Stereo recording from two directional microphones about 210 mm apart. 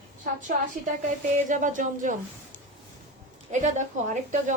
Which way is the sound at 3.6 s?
35° right (ahead or behind).